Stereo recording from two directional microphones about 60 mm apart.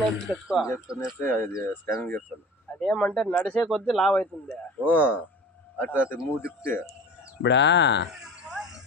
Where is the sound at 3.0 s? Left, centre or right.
Centre.